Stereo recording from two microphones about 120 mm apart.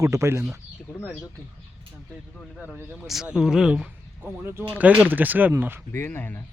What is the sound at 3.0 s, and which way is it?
Speech, 5° right (ahead or behind).